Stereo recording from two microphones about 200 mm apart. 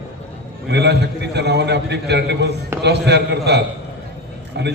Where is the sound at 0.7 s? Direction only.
60° right (ahead or behind).